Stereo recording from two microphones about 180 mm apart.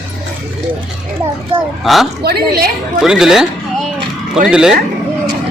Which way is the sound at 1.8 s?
Centre (ahead or behind).